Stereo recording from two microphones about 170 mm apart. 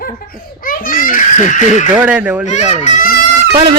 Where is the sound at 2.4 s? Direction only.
45° left (ahead or behind).